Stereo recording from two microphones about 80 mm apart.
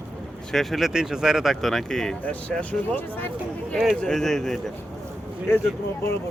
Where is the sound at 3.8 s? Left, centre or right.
Centre.